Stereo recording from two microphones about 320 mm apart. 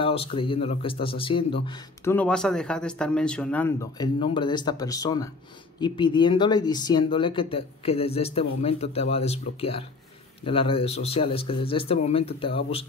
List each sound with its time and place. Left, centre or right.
0.0 s speech: centre